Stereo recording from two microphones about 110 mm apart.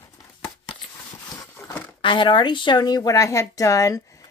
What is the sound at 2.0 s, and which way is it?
A woman's voice, 50° left (ahead or behind).